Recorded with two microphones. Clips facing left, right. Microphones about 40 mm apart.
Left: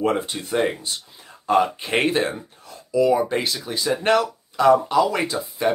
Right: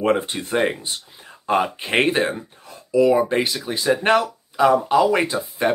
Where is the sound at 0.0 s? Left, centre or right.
Right.